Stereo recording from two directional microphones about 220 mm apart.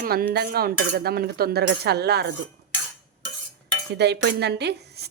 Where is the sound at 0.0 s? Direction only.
40° right (ahead or behind).